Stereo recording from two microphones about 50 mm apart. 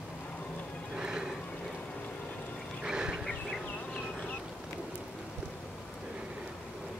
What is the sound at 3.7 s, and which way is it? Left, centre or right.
Bee, left.